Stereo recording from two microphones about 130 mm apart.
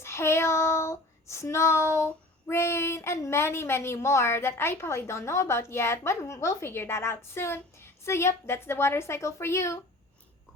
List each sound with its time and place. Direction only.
0.0 s child singing: 20° left (ahead or behind)
2.5 s a woman's voice: 20° left (ahead or behind)